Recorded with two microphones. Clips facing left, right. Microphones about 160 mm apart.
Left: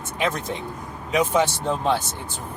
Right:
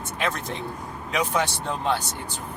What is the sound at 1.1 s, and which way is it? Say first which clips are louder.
Speech: left 5 dB; 20° left (ahead or behind).